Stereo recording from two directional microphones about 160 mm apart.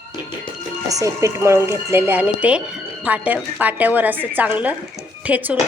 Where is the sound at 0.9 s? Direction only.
20° right (ahead or behind).